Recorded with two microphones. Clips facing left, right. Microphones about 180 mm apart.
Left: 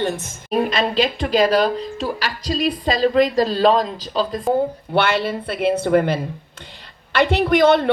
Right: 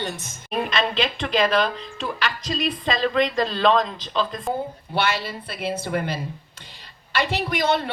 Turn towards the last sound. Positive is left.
turn(degrees=55)  # may be behind; listen again after turning